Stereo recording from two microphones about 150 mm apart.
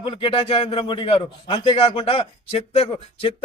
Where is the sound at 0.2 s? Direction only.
40° left (ahead or behind).